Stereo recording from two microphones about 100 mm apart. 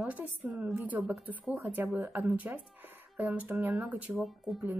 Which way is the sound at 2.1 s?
15° right (ahead or behind).